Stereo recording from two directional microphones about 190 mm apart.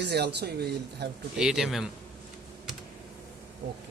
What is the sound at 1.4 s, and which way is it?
Speech, centre (ahead or behind).